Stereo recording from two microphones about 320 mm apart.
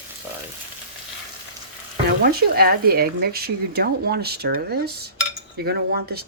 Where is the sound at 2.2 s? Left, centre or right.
Right.